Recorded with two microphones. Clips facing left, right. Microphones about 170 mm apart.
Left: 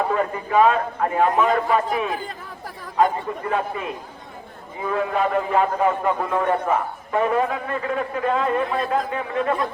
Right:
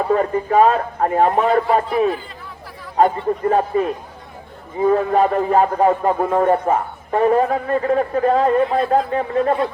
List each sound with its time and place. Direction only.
0.1 s a man's voice: 40° right (ahead or behind)
3.0 s a man's voice: 40° right (ahead or behind)